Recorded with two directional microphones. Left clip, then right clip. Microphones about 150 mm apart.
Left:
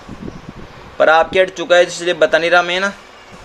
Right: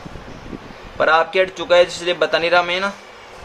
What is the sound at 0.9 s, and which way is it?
A man's voice, 30° left (ahead or behind).